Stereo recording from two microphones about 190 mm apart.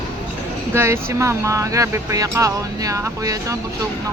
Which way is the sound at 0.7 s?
15° right (ahead or behind).